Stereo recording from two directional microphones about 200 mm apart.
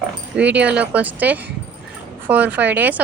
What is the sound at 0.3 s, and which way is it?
A woman's voice, 5° right (ahead or behind).